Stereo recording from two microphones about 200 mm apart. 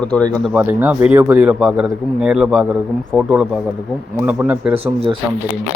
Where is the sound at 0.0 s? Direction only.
5° left (ahead or behind).